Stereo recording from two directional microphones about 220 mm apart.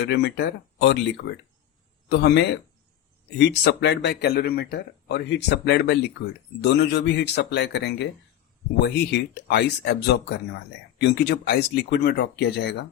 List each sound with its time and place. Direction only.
0.1 s speech: 50° left (ahead or behind)